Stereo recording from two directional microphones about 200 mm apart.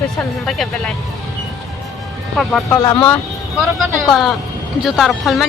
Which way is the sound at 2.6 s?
20° left (ahead or behind).